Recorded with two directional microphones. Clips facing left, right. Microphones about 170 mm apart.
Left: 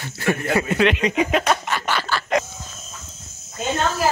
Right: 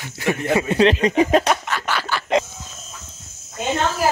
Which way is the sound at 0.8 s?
35° right (ahead or behind).